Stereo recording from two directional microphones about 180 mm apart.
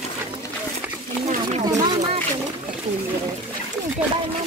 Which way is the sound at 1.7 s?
20° right (ahead or behind).